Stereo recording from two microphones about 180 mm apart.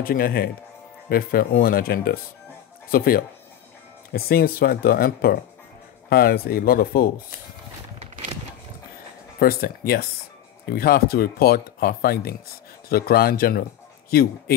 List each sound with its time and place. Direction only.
0.0 s speech: 55° left (ahead or behind)
9.4 s speech: 55° left (ahead or behind)